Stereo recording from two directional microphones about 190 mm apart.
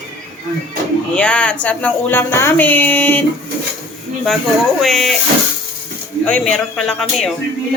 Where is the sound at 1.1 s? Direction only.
5° left (ahead or behind).